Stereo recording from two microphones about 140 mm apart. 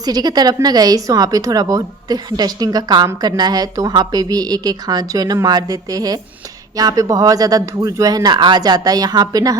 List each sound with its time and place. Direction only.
0.0 s speech: 30° right (ahead or behind)